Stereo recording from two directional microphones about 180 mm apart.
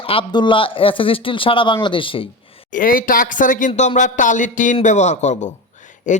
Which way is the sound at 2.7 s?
50° left (ahead or behind).